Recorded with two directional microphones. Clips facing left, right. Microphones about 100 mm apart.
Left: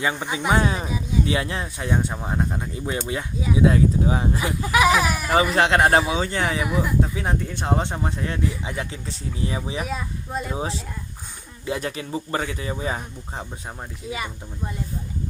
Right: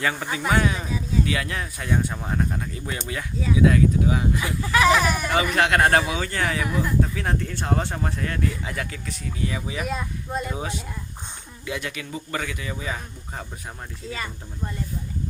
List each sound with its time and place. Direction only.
0.0 s speech: 15° left (ahead or behind)
0.9 s speech: 15° left (ahead or behind)
1.2 s speech: 25° left (ahead or behind); by 5.3 s 5° left (ahead or behind)
5.3 s speech: 30° left (ahead or behind)
6.7 s speech: 10° left (ahead or behind)
7.0 s speech: 20° left (ahead or behind)
9.8 s speech: centre (ahead or behind)
10.5 s speech: 30° left (ahead or behind)
14.1 s speech: 10° left (ahead or behind)